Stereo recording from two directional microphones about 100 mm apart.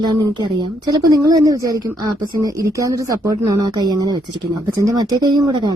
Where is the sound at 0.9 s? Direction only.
35° right (ahead or behind).